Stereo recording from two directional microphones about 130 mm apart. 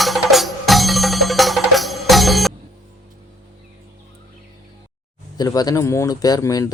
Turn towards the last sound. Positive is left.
turn(degrees=25)  # may be behind; listen again after turning